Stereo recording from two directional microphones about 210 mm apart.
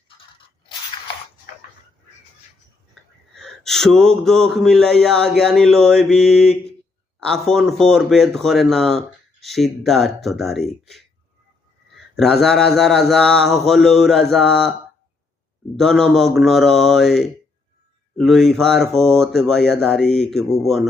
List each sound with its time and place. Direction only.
0.9 s biting: 25° left (ahead or behind)
3.3 s speech: centre (ahead or behind)
12.1 s speech: centre (ahead or behind)
15.7 s speech: centre (ahead or behind)